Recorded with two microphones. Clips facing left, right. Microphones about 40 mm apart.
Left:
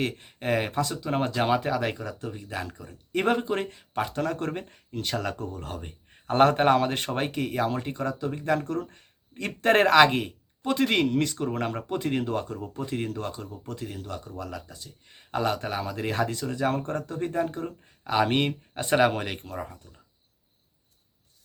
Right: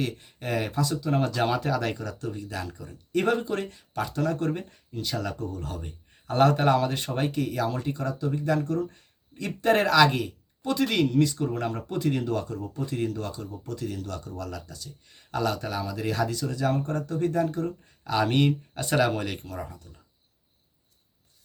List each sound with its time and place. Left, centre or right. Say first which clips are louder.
0.0 s speech: left 2 dB; left
13.8 s speech: right 3 dB; left